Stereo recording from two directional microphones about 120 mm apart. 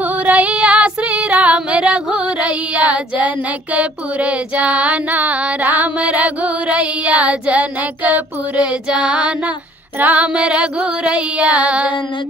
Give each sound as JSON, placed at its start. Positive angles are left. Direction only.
{"t": 0.2, "sound": "female singing", "side_deg": -10}
{"t": 3.7, "sound": "music", "side_deg": -10}